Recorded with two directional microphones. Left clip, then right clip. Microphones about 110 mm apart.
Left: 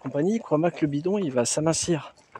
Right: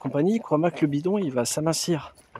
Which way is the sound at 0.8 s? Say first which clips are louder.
Right 2 dB; 15° right (ahead or behind).